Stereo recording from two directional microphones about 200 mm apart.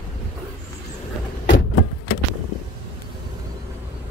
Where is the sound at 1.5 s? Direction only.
70° left (ahead or behind).